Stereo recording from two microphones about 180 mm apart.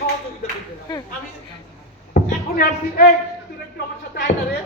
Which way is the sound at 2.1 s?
55° left (ahead or behind).